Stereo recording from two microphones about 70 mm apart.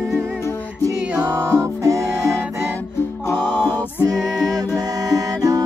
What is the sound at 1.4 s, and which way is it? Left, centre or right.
Music, right.